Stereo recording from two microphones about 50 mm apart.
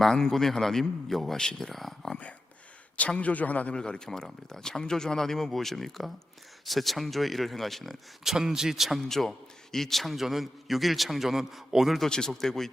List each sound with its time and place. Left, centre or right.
0.0 s a man's voice: centre
3.2 s a man's voice: left
3.8 s a man's voice: centre
8.2 s a man's voice: centre
11.9 s speech: centre